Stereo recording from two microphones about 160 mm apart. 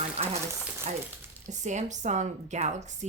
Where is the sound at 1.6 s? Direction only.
50° right (ahead or behind).